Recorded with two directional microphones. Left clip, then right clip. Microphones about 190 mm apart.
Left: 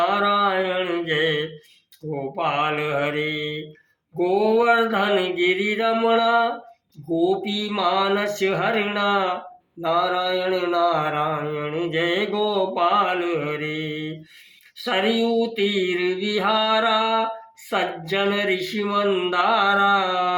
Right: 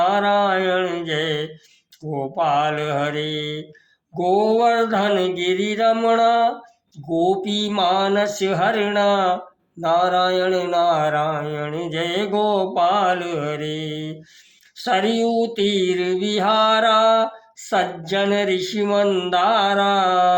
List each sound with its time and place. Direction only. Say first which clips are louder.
0.0 s mantra: right 2 dB; 40° right (ahead or behind)